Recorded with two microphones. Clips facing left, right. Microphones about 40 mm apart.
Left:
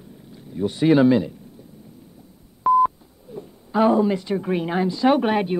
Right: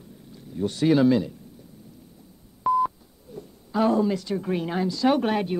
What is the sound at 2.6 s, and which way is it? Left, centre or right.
Speech, centre.